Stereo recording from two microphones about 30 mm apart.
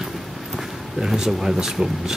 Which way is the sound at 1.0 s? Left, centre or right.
Centre.